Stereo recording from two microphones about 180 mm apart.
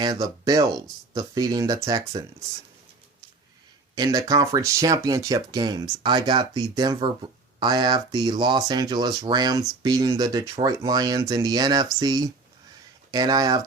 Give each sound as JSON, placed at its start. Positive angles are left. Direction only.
{"t": 0.0, "sound": "speech", "side_deg": -20}
{"t": 3.9, "sound": "speech", "side_deg": -20}